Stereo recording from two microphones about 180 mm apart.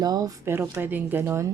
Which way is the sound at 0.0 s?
20° right (ahead or behind).